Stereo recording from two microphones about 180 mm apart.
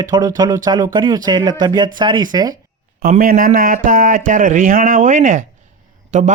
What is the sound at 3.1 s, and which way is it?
A man's voice, 50° right (ahead or behind).